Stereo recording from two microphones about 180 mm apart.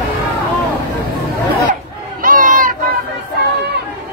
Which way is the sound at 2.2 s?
45° right (ahead or behind).